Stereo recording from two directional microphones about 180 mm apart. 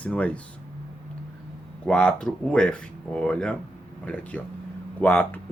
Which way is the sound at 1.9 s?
5° left (ahead or behind).